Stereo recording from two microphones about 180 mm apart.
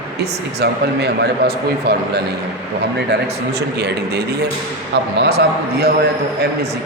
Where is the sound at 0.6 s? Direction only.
65° right (ahead or behind).